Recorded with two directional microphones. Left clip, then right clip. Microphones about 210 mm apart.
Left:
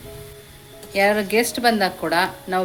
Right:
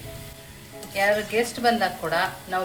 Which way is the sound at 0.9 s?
50° left (ahead or behind).